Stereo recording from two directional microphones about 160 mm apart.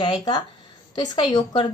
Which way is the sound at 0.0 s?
30° left (ahead or behind).